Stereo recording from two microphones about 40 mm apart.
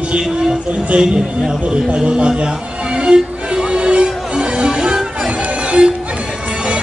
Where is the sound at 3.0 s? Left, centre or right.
Centre.